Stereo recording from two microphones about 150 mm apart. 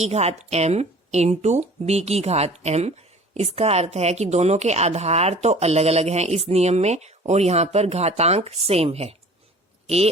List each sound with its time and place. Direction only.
0.0 s a woman's voice: 45° right (ahead or behind)